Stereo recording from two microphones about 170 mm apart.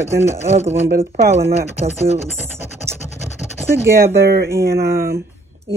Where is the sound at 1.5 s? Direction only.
35° right (ahead or behind).